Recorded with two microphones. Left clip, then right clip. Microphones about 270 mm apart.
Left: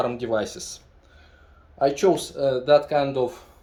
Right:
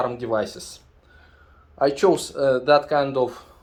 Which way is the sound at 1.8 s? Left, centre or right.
Centre.